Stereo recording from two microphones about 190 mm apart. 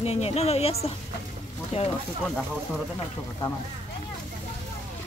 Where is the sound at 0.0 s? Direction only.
30° left (ahead or behind).